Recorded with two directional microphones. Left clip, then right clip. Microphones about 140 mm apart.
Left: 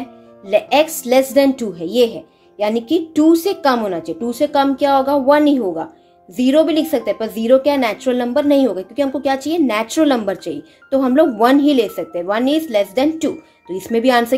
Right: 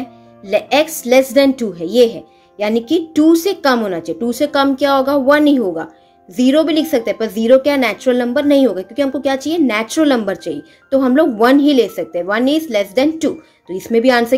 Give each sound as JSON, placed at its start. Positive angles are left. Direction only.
{"t": 0.5, "sound": "a woman's voice", "side_deg": -20}